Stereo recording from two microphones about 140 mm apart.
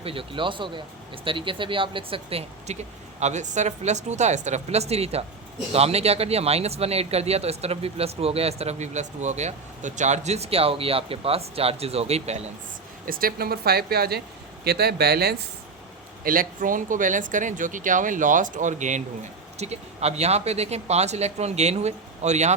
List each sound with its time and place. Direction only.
0.0 s speech: 40° right (ahead or behind)
3.2 s a woman's voice: 55° right (ahead or behind)
13.1 s speech: 90° right
16.2 s a man's voice: 90° right; by 22.5 s 55° right (ahead or behind)